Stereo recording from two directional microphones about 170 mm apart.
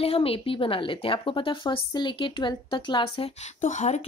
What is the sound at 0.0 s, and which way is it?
Speech, 35° left (ahead or behind).